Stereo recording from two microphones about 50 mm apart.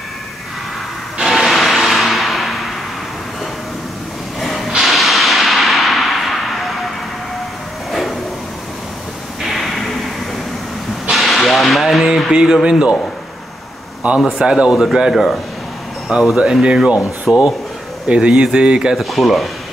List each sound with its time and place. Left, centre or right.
1.2 s music: centre
4.4 s a sound: centre
7.9 s vehicle: centre
9.4 s a sound: centre
11.1 s whip: centre
12.3 s speech: centre
14.0 s speech: right
17.2 s speech: centre
18.0 s speech: centre
18.9 s speech: centre